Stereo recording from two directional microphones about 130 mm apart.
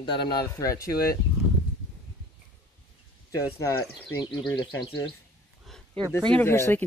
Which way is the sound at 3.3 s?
20° left (ahead or behind).